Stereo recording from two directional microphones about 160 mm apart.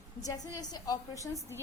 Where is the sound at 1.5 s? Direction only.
15° right (ahead or behind).